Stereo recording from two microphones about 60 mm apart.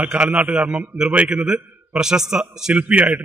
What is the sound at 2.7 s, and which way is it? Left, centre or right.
Speech, right.